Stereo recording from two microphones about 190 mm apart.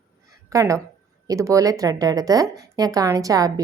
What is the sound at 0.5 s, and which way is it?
Speech, 15° right (ahead or behind).